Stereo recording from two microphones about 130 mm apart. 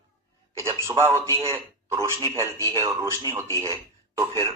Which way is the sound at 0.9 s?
20° left (ahead or behind).